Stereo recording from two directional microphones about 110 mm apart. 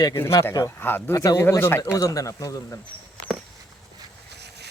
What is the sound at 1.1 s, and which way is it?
Speech, 35° left (ahead or behind).